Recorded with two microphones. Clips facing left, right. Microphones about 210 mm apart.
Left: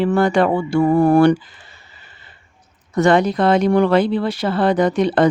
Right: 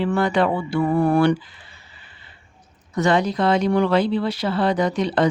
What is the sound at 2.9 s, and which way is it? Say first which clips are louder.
Speech: left 5 dB; 55° left (ahead or behind).